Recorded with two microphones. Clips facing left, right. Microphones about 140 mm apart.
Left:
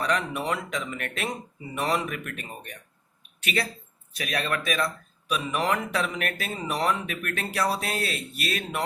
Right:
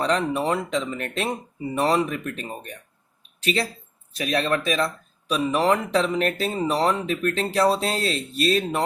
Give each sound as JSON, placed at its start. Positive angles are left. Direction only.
{"t": 0.0, "sound": "speech", "side_deg": -30}